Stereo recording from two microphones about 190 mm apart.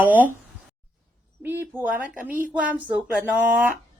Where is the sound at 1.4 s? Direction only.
10° right (ahead or behind).